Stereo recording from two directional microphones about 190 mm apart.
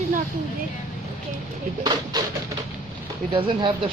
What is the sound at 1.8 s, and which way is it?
Speech, 20° right (ahead or behind).